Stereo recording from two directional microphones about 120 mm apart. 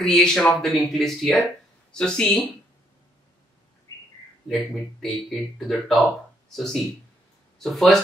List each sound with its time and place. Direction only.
0.0 s speech: 5° left (ahead or behind)
3.9 s bird: 35° left (ahead or behind)
5.0 s speech: centre (ahead or behind)